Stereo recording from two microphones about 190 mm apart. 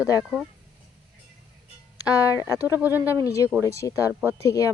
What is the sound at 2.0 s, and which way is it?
Speech, 10° right (ahead or behind).